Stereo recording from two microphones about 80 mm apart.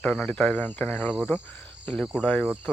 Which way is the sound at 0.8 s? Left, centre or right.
Centre.